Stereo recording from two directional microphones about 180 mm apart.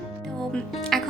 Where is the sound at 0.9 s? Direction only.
Centre (ahead or behind).